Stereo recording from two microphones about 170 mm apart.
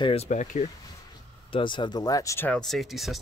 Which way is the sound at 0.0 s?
35° left (ahead or behind).